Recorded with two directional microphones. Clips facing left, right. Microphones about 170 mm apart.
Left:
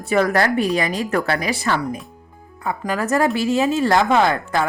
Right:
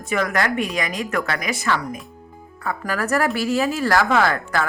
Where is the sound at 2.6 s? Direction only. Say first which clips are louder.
Left 2 dB; 20° left (ahead or behind).